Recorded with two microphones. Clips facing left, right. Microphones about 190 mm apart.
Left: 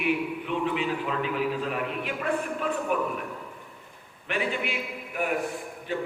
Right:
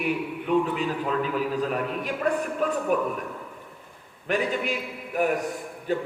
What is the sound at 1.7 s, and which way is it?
A man's voice, 40° right (ahead or behind).